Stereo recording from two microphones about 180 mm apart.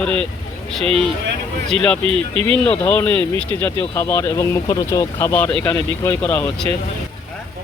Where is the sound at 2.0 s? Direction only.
30° right (ahead or behind).